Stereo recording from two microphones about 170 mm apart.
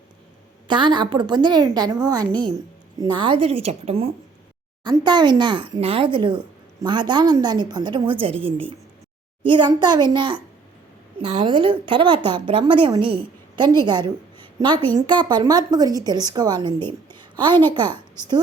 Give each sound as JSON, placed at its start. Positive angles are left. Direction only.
{"t": 0.7, "sound": "a woman's voice", "side_deg": -25}
{"t": 4.8, "sound": "a woman's voice", "side_deg": -25}
{"t": 17.1, "sound": "a sound", "side_deg": -25}